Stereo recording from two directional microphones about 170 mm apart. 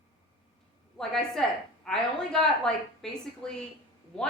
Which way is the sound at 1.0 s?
5° left (ahead or behind).